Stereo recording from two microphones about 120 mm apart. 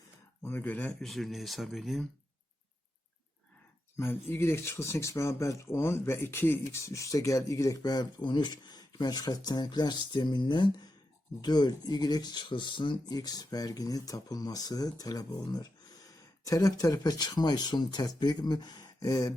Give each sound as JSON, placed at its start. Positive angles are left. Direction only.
{"t": 0.4, "sound": "speech", "side_deg": 15}
{"t": 3.9, "sound": "speech", "side_deg": 20}